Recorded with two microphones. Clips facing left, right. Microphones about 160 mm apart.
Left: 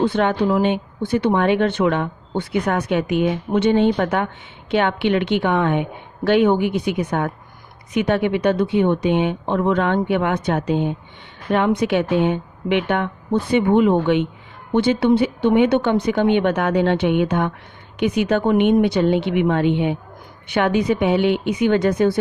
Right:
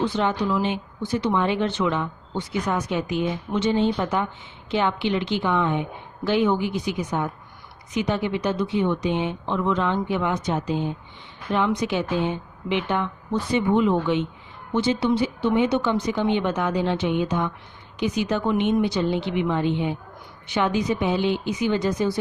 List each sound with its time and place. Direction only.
0.0 s speech: 60° left (ahead or behind)